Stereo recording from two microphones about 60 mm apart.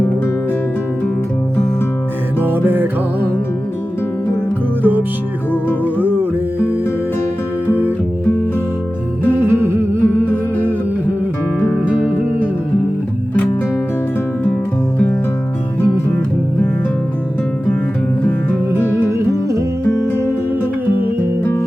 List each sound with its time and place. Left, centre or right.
2.4 s music: right
5.8 s music: right
9.3 s music: right
11.7 s music: right
19.0 s music: right